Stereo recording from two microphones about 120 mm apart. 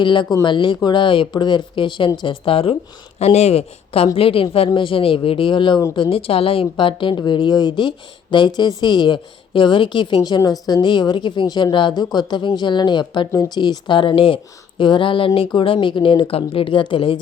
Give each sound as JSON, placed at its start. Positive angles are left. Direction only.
{"t": 0.0, "sound": "a woman's voice", "side_deg": 40}
{"t": 3.2, "sound": "a woman's voice", "side_deg": 60}